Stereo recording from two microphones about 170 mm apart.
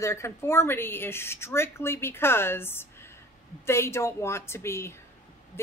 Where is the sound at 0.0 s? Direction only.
15° left (ahead or behind).